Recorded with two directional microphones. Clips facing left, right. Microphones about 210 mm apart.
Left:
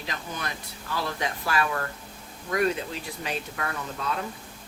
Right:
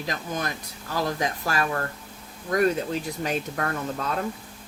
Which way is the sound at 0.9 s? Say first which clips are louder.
Right 4 dB; 45° right (ahead or behind).